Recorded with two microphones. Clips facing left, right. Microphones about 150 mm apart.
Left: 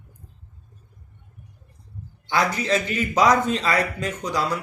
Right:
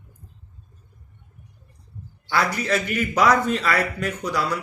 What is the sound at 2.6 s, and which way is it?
A man's voice, 20° left (ahead or behind).